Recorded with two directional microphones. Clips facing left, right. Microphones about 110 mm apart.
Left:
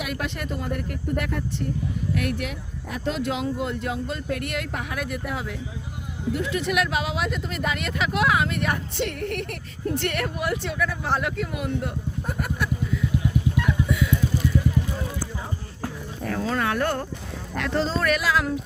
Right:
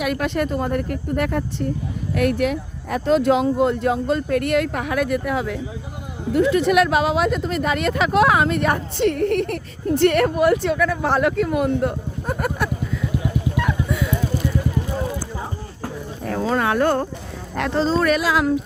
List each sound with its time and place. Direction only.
0.0 s speech: 50° right (ahead or behind)
6.3 s speech: 45° right (ahead or behind)
16.4 s speech: 25° right (ahead or behind)